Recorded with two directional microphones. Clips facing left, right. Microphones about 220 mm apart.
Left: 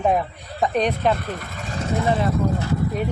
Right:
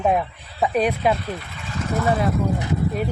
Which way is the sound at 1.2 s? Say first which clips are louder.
Left 1 dB; 45° left (ahead or behind).